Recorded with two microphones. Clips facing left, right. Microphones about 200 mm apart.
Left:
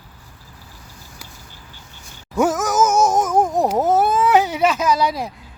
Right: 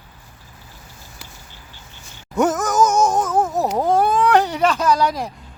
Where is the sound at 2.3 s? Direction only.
Centre (ahead or behind).